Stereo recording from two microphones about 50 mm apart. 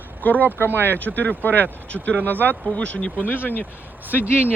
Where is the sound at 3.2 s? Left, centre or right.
Left.